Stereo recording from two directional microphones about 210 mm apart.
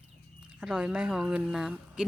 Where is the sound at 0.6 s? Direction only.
Centre (ahead or behind).